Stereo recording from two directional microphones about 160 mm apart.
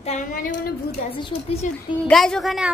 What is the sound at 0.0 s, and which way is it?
Speech, 50° left (ahead or behind).